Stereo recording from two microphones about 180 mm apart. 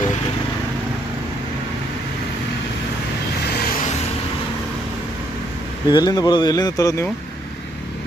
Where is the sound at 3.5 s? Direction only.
45° left (ahead or behind).